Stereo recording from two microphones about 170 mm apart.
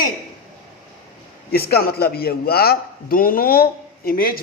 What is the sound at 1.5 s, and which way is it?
A man's voice, 65° left (ahead or behind).